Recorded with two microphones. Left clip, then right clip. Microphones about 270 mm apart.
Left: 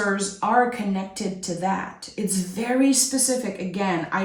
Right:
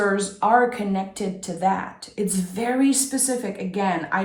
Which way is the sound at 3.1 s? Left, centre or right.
Centre.